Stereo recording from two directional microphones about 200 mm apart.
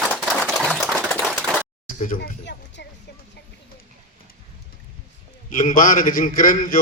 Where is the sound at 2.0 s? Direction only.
45° left (ahead or behind); by 2.8 s 60° left (ahead or behind).